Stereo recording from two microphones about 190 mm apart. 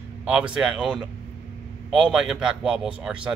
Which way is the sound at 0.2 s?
5° right (ahead or behind).